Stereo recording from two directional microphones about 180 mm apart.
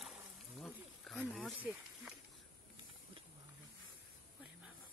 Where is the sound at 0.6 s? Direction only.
Centre (ahead or behind).